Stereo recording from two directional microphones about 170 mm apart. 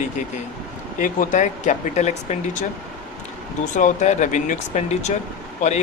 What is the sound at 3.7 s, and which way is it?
Speech, 45° left (ahead or behind).